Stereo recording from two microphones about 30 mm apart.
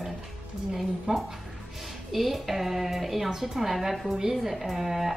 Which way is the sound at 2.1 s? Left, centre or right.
Centre.